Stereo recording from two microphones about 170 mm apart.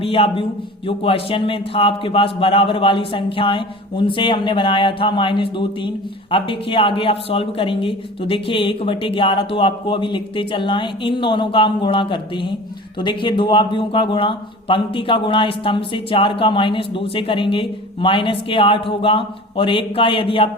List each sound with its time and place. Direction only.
0.0 s speech: 35° left (ahead or behind)